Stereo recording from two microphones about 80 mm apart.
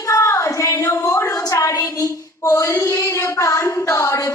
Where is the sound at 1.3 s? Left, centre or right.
Left.